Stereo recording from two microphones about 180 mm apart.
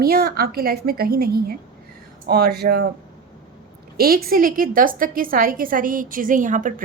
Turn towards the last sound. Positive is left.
turn(degrees=-45)  # may be behind; listen again after turning